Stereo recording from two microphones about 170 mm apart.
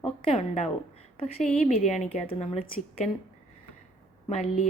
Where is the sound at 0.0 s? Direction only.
35° left (ahead or behind).